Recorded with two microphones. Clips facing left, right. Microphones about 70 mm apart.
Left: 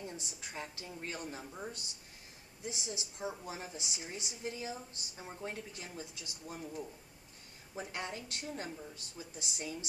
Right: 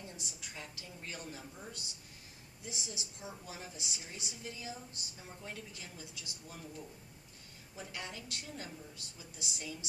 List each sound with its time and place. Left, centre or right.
0.0 s a woman's voice: left
7.8 s a woman's voice: left